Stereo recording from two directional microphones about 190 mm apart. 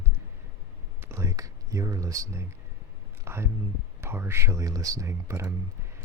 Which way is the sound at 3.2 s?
15° right (ahead or behind).